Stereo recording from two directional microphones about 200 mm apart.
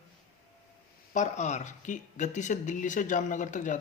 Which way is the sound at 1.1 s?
35° left (ahead or behind).